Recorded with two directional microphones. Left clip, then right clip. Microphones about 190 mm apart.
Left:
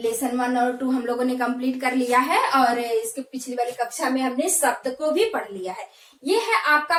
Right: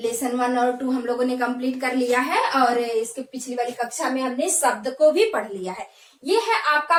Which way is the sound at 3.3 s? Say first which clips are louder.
Even; 15° right (ahead or behind).